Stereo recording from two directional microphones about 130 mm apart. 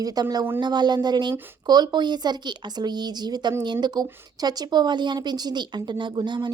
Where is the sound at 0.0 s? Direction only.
30° right (ahead or behind).